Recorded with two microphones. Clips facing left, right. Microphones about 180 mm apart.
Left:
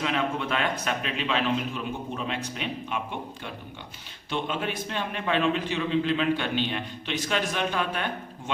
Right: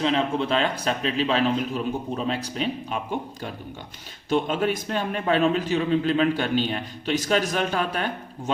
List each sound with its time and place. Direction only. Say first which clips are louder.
0.0 s a man's voice: right 5 dB; 30° right (ahead or behind)